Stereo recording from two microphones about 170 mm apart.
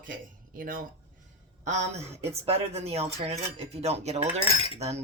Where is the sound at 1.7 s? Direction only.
40° right (ahead or behind).